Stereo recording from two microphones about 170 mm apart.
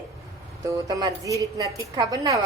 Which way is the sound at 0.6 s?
20° right (ahead or behind).